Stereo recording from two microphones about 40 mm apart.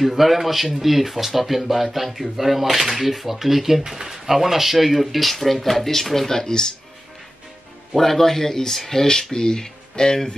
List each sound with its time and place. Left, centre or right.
0.0 s speech: centre
7.9 s speech: centre